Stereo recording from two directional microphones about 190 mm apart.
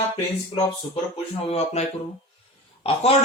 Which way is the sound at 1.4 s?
35° left (ahead or behind).